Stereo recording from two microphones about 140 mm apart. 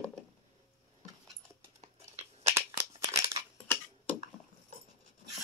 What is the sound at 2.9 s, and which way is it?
Scissors, 40° right (ahead or behind).